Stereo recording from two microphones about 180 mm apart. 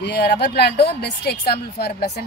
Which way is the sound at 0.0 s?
70° left (ahead or behind).